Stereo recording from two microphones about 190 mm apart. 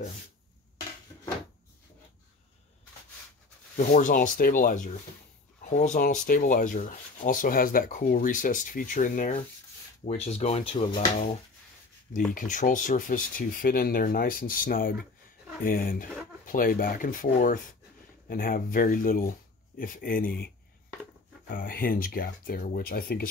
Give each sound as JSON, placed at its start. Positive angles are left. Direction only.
{"t": 3.7, "sound": "speech", "side_deg": 50}
{"t": 10.0, "sound": "speech", "side_deg": 35}
{"t": 12.4, "sound": "speech", "side_deg": 45}
{"t": 21.5, "sound": "speech", "side_deg": 50}